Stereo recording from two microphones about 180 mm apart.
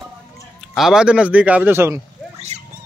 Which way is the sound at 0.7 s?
Centre (ahead or behind).